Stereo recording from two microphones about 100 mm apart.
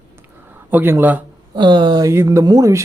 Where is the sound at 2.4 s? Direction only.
45° right (ahead or behind).